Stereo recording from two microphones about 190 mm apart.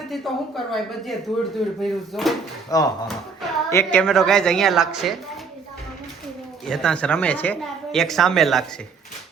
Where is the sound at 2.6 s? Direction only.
20° left (ahead or behind).